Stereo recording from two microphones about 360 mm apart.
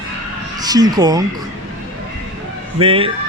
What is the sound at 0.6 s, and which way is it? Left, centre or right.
Speech, centre.